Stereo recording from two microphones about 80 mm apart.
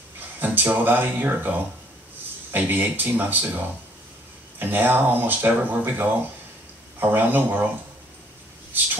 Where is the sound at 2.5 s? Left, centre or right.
Right.